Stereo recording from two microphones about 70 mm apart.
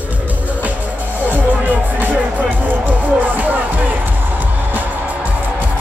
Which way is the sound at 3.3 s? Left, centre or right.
Right.